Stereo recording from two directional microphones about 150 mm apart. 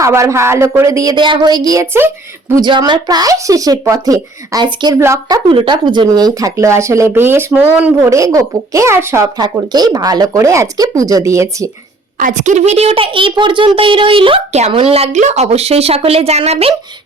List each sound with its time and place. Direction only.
0.0 s speech: 20° right (ahead or behind)
2.6 s speech: 30° right (ahead or behind)
5.5 s speech: 35° right (ahead or behind)
12.1 s a child's voice: 60° right (ahead or behind); by 16.7 s 40° right (ahead or behind)